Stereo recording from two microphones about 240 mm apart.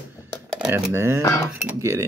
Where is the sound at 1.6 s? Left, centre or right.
Centre.